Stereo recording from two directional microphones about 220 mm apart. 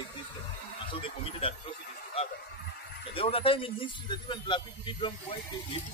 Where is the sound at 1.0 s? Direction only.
25° left (ahead or behind).